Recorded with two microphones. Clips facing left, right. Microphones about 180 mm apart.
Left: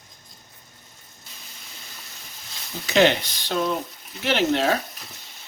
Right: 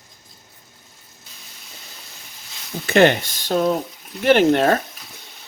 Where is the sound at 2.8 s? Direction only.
55° right (ahead or behind).